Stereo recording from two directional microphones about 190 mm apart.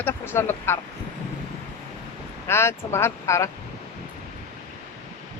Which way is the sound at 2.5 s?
15° left (ahead or behind).